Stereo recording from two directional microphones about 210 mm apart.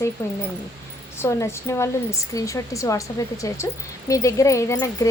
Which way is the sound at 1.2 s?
15° left (ahead or behind).